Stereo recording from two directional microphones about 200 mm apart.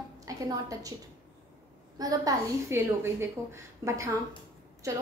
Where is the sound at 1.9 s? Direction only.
15° right (ahead or behind).